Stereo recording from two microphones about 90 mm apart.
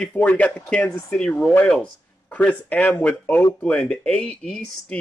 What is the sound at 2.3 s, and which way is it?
Speech, 15° left (ahead or behind).